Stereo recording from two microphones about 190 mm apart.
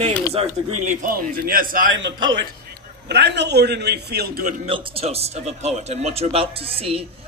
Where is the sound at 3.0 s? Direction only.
60° right (ahead or behind).